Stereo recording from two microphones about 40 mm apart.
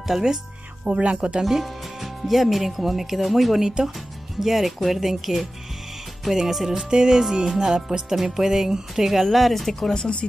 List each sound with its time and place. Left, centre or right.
0.0 s speech: centre
0.8 s speech: right
1.4 s speech: centre
3.6 s speech: centre
4.4 s speech: centre
6.7 s speech: centre
9.8 s speech: left